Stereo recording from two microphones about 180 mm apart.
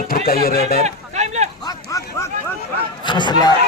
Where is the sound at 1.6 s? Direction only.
15° left (ahead or behind).